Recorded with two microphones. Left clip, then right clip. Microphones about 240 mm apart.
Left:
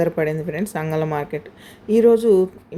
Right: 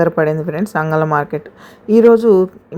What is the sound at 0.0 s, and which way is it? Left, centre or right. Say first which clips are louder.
Speech: right 6 dB; centre.